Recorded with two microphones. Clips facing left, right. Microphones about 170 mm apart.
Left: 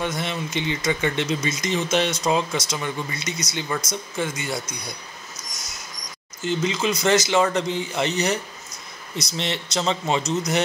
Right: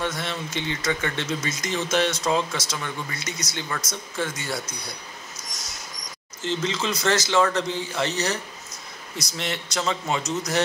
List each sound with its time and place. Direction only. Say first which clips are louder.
0.0 s speech: left 2 dB; 20° left (ahead or behind)
6.4 s a man's voice: left 3 dB; 10° left (ahead or behind)